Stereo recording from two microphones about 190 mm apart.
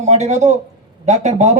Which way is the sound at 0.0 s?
35° right (ahead or behind).